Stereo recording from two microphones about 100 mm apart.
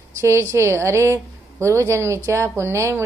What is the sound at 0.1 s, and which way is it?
A woman's voice, 30° right (ahead or behind).